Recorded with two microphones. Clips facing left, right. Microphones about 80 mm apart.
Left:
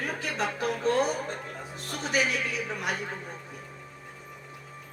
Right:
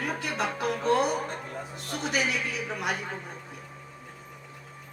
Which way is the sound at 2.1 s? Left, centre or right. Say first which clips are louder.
Left 2 dB; left.